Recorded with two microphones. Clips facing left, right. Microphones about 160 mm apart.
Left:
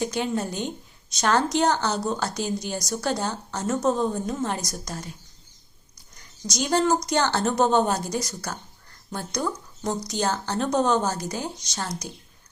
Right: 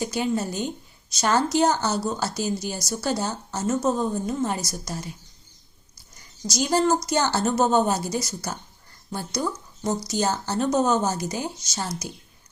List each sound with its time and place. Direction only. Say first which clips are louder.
0.0 s a woman's voice: right 1 dB; 5° right (ahead or behind)
6.1 s a woman's voice: right 2 dB; centre (ahead or behind)